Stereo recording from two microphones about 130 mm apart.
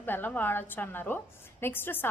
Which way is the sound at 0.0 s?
15° left (ahead or behind).